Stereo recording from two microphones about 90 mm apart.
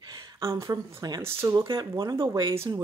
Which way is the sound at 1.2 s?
30° right (ahead or behind).